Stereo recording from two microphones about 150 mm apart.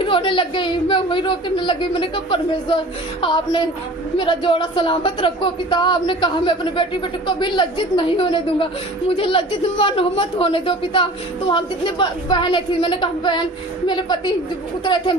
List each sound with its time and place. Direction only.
0.0 s speech: 35° left (ahead or behind)